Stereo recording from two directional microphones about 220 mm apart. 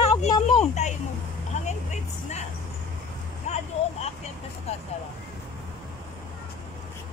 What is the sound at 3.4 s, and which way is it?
Vehicle, 30° left (ahead or behind).